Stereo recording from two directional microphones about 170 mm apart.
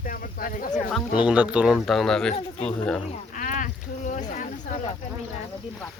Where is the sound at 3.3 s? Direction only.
50° left (ahead or behind).